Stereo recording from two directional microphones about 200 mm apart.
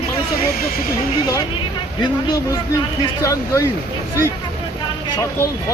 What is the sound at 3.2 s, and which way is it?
Speech, 15° left (ahead or behind).